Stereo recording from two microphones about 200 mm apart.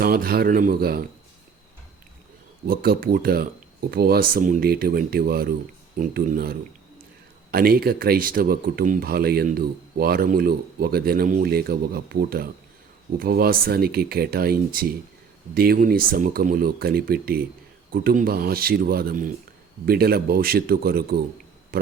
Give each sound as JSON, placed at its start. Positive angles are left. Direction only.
{"t": 0.0, "sound": "speech", "side_deg": -50}
{"t": 2.6, "sound": "speech", "side_deg": -50}